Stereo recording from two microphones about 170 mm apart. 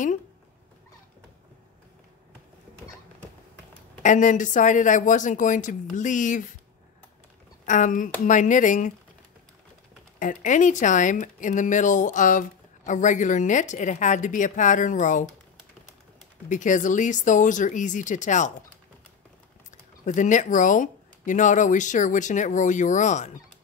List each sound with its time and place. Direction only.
4.0 s speech: 45° left (ahead or behind)
7.6 s speech: 50° left (ahead or behind)
10.1 s speech: 50° left (ahead or behind)
16.4 s speech: 50° left (ahead or behind)
20.1 s speech: 45° left (ahead or behind)